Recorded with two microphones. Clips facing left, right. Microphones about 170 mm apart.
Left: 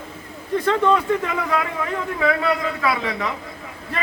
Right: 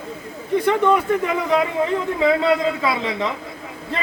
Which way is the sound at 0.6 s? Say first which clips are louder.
Right 1 dB; 15° right (ahead or behind).